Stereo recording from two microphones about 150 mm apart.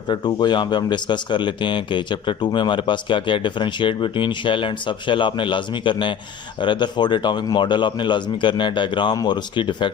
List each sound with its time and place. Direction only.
0.1 s speech: 30° left (ahead or behind)